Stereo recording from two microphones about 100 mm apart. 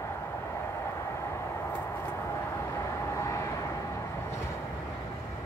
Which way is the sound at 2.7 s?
30° left (ahead or behind).